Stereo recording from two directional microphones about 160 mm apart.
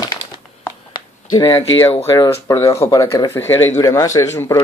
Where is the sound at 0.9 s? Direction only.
25° left (ahead or behind).